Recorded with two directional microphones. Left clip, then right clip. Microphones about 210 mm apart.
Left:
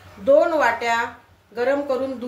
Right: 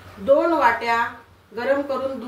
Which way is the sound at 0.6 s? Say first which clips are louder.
Right 1 dB; 45° left (ahead or behind).